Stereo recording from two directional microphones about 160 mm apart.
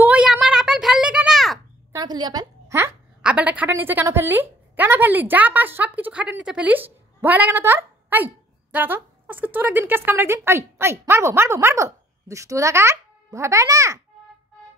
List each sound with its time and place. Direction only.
0.0 s a sound: 10° right (ahead or behind)
1.9 s a woman's voice: 25° right (ahead or behind)
3.2 s a woman's voice: 5° right (ahead or behind)